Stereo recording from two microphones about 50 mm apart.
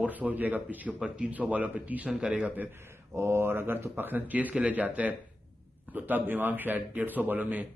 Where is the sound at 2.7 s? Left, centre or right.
Right.